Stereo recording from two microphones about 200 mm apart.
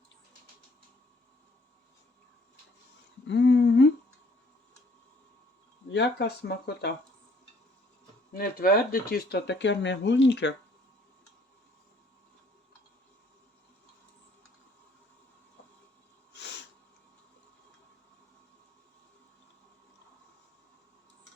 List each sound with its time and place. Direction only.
3.2 s humming: 60° left (ahead or behind)
5.9 s speech: 60° left (ahead or behind)
8.3 s speech: 45° left (ahead or behind); by 10.5 s 65° left (ahead or behind)